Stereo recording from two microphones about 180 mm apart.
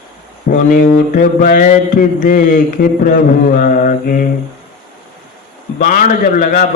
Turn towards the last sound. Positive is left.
turn(degrees=50)  # may be behind; listen again after turning